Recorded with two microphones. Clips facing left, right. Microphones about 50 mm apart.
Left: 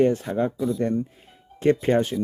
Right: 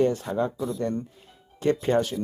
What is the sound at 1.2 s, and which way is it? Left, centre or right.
Music, left.